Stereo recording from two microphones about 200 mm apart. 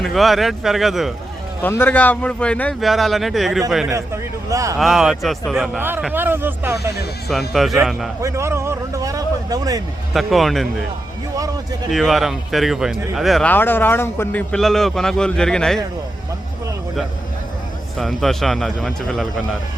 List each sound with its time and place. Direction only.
0.0 s speech: centre (ahead or behind)
1.6 s speech: 10° left (ahead or behind)
3.8 s a man's voice: 15° right (ahead or behind)
4.8 s speech: centre (ahead or behind)
7.3 s speech: centre (ahead or behind)
8.2 s speech: 15° right (ahead or behind)
10.1 s speech: centre (ahead or behind)
11.9 s speech: centre (ahead or behind)
17.9 s speech: centre (ahead or behind)